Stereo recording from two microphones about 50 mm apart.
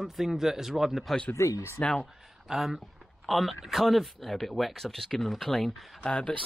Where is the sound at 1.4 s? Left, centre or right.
Left.